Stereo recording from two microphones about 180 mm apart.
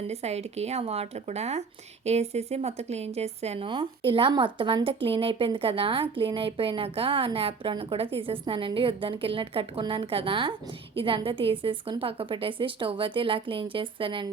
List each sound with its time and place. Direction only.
0.1 s a woman's voice: 35° right (ahead or behind)